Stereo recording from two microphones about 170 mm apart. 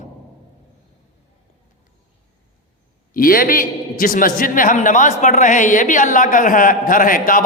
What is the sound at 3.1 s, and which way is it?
A man's voice, 55° left (ahead or behind).